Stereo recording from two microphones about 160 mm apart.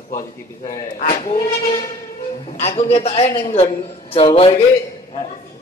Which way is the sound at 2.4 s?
45° left (ahead or behind).